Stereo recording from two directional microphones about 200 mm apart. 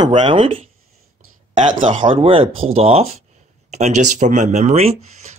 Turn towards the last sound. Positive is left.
turn(degrees=-35)  # may be behind; listen again after turning